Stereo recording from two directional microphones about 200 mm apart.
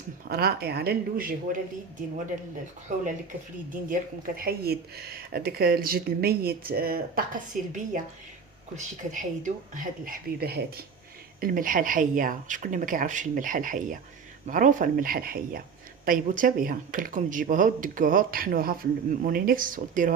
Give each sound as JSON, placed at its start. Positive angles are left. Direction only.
{"t": 0.3, "sound": "speech", "side_deg": -50}
{"t": 4.4, "sound": "speech", "side_deg": -50}